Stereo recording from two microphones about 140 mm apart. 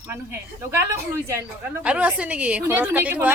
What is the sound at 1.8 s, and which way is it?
A woman's voice, 10° right (ahead or behind).